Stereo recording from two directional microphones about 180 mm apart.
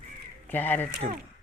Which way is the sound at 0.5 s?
10° left (ahead or behind).